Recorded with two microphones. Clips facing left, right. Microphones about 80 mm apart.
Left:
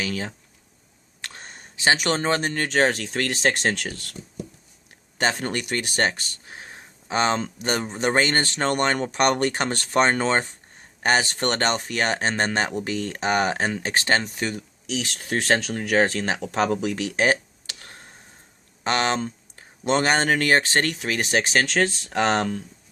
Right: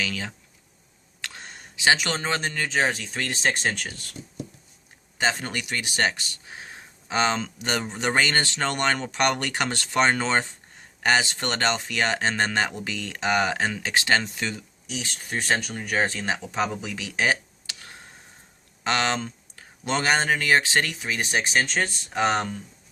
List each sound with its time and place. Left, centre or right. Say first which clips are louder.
0.0 s speech: left 2 dB; left
1.2 s a sound: even; left
2.6 s speech: left 4 dB; left
5.1 s speech: left 2 dB; left
14.8 s speech: left 5 dB; left
20.9 s speech: left 3 dB; left